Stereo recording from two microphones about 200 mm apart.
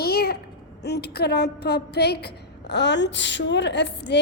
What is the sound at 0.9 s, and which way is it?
A woman's voice, 55° left (ahead or behind).